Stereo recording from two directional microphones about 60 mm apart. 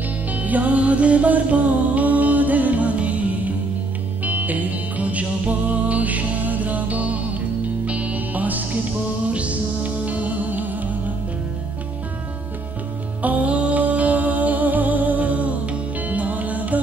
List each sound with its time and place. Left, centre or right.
0.3 s music: right
13.2 s music: right